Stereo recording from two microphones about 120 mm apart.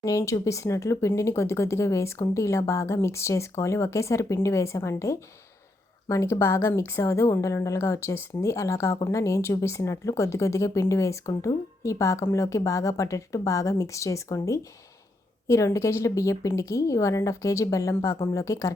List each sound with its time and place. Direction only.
0.0 s a woman's voice: 25° left (ahead or behind)